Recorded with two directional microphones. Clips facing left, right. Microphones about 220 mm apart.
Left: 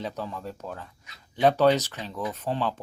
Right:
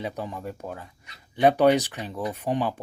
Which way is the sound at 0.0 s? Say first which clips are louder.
Right 1 dB; 15° right (ahead or behind).